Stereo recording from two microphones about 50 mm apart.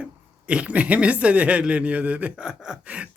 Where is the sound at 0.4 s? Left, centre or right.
Right.